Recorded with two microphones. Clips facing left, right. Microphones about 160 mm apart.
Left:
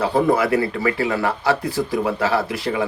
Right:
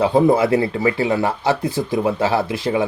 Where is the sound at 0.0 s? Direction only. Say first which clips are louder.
Right 3 dB; 20° right (ahead or behind).